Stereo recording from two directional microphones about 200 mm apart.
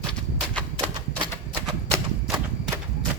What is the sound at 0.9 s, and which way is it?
Typewriter, 20° right (ahead or behind).